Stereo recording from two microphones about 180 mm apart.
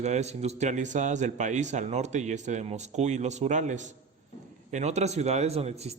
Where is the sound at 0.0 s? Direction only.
40° right (ahead or behind).